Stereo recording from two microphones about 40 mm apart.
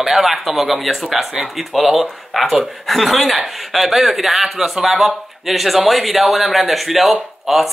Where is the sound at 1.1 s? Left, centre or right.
Centre.